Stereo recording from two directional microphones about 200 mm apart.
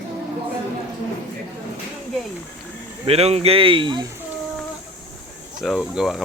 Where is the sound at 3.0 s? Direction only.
30° right (ahead or behind).